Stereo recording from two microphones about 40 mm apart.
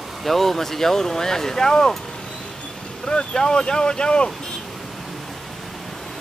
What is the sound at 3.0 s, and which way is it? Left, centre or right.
Speech, centre.